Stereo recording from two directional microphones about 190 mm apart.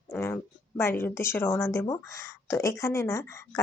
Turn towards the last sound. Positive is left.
turn(degrees=15)  # may be behind; listen again after turning